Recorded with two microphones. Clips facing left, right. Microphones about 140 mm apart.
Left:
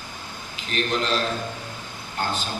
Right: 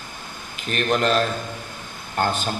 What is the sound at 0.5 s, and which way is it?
Speech, 55° right (ahead or behind).